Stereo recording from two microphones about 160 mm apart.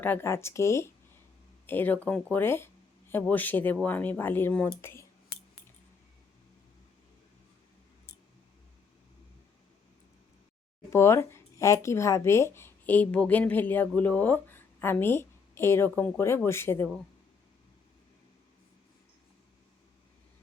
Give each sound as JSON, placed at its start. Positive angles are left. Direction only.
{"t": 0.0, "sound": "speech", "side_deg": 15}
{"t": 10.9, "sound": "speech", "side_deg": 15}